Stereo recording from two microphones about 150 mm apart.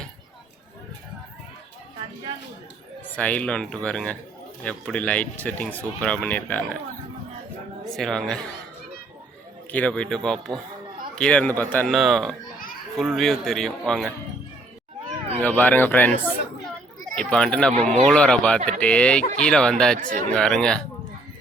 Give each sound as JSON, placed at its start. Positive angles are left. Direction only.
{"t": 3.2, "sound": "speech", "side_deg": 10}
{"t": 7.9, "sound": "speech", "side_deg": 0}
{"t": 9.7, "sound": "speech", "side_deg": 5}
{"t": 15.4, "sound": "speech", "side_deg": 10}
{"t": 17.2, "sound": "speech", "side_deg": 5}
{"t": 20.0, "sound": "speech", "side_deg": -60}
{"t": 20.3, "sound": "speech", "side_deg": 5}